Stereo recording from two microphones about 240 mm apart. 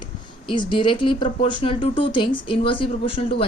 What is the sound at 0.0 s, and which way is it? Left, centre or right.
Speech, centre.